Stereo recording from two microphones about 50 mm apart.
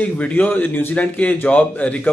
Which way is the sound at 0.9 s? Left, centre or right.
Left.